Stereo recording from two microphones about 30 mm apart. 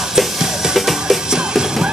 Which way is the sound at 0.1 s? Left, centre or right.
Centre.